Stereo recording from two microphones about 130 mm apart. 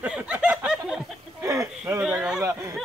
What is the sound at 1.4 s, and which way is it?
Speech, 25° right (ahead or behind).